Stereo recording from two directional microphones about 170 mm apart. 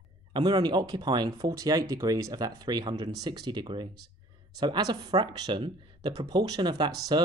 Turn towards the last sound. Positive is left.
turn(degrees=-25)  # may be behind; listen again after turning